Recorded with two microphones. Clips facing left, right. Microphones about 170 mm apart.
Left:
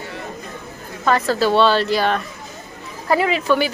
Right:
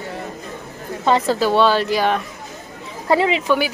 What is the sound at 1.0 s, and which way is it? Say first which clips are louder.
A woman's voice: right 1 dB; 20° right (ahead or behind).